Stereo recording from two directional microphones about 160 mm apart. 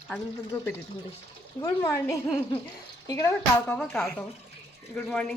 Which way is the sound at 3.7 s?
5° left (ahead or behind).